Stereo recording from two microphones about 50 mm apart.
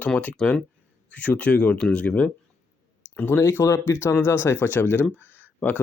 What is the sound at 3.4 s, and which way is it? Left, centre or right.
Speech, left.